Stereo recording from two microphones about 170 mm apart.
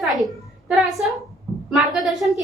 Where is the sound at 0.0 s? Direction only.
Centre (ahead or behind).